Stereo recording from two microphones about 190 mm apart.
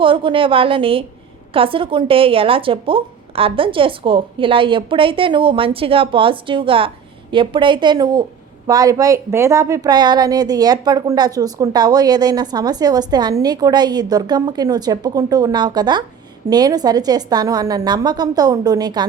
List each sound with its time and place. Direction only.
0.0 s a woman's voice: 25° right (ahead or behind)